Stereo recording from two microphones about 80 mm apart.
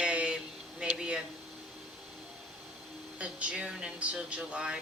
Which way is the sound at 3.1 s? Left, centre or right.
Centre.